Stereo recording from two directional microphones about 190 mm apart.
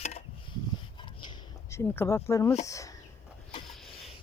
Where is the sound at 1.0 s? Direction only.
25° left (ahead or behind).